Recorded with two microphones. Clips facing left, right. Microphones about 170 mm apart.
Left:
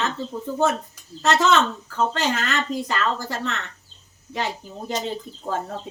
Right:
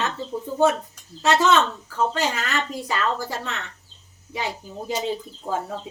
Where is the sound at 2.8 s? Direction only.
10° right (ahead or behind).